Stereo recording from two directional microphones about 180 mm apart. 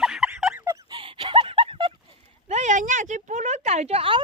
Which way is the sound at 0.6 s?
20° right (ahead or behind).